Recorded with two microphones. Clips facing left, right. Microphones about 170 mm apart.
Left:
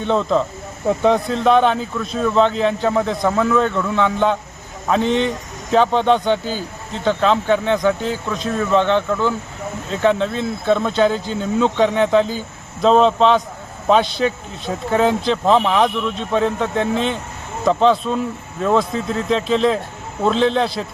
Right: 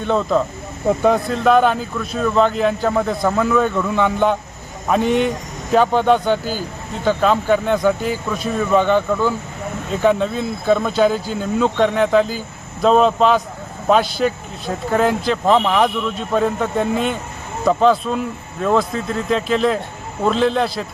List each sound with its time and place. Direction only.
0.0 s speech: 5° right (ahead or behind)